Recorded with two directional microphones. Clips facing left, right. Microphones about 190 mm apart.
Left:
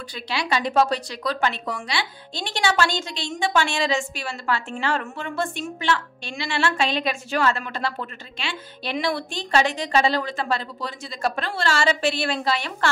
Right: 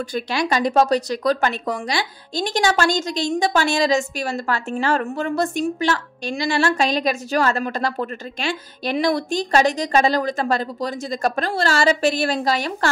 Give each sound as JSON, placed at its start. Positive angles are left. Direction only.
{"t": 0.1, "sound": "speech", "side_deg": -45}